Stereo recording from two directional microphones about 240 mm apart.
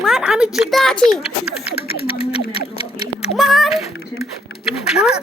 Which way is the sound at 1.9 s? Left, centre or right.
Left.